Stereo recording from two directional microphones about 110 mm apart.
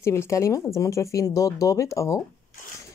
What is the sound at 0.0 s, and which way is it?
Speech, 25° left (ahead or behind).